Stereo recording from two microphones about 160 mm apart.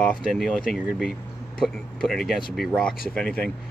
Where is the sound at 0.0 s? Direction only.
5° left (ahead or behind).